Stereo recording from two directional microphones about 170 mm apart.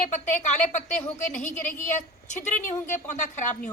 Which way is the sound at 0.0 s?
45° left (ahead or behind).